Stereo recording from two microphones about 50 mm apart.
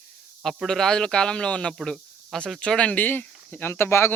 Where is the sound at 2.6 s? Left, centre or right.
Left.